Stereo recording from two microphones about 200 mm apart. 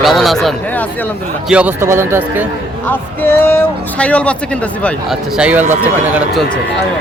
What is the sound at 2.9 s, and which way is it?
Speech, 10° left (ahead or behind).